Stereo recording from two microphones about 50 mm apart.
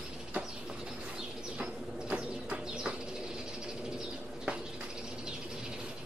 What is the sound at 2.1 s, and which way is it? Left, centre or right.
Bird, right.